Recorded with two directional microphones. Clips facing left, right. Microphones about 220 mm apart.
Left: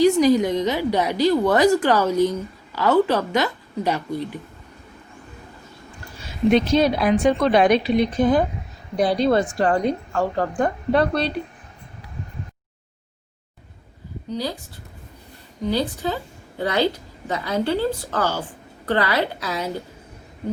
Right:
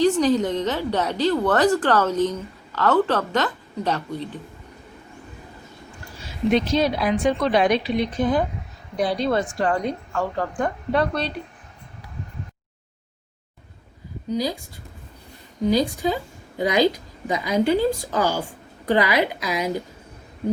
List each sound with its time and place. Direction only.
0.0 s speech: 10° left (ahead or behind)
6.5 s a woman's voice: 55° left (ahead or behind); by 11.3 s 35° left (ahead or behind)
14.3 s a woman's voice: 10° right (ahead or behind)
15.6 s a woman's voice: 15° right (ahead or behind)